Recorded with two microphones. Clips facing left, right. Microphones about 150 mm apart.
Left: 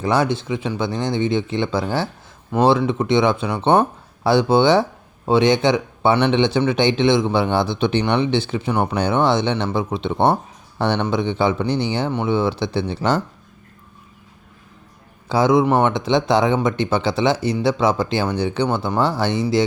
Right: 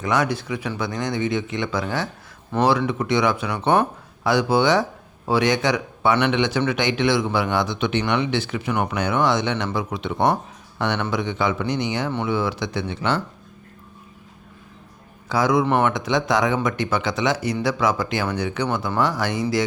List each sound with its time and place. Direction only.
0.0 s speech: 30° left (ahead or behind)
15.3 s speech: 25° left (ahead or behind)